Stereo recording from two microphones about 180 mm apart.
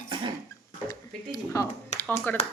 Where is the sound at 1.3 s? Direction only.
20° left (ahead or behind).